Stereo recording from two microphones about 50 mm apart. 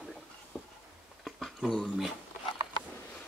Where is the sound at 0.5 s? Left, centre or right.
Centre.